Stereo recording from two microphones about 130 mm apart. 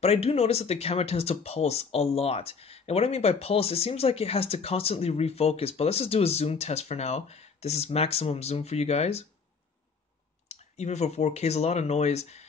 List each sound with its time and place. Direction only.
0.0 s speech: 55° left (ahead or behind)
10.5 s speech: 60° left (ahead or behind)